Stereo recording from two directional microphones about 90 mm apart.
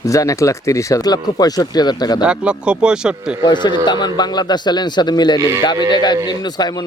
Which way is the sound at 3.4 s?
55° left (ahead or behind).